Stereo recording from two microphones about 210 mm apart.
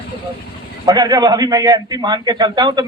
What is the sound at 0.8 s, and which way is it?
Speech, 20° right (ahead or behind).